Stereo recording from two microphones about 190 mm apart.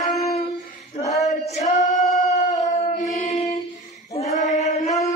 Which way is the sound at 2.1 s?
40° left (ahead or behind).